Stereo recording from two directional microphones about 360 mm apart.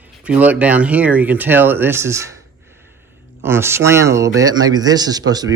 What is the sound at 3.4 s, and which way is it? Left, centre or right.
Speech, centre.